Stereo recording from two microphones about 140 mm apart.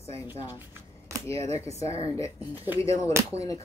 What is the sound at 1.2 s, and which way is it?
Speech, 20° left (ahead or behind).